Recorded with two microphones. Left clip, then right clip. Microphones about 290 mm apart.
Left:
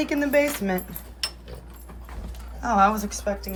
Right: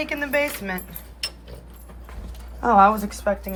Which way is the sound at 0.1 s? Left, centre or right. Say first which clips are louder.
Left 3 dB; centre.